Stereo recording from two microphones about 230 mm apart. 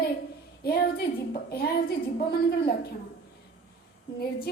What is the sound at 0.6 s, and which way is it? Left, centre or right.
A woman's voice, left.